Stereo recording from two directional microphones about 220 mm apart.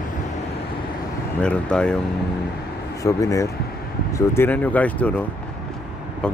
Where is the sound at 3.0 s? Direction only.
15° left (ahead or behind).